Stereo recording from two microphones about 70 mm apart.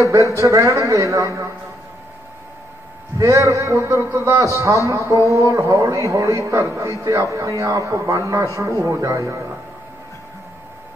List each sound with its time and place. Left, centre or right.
0.3 s a man's voice: right
3.2 s a man's voice: right